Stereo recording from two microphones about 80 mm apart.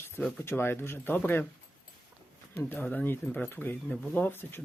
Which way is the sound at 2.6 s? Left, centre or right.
Left.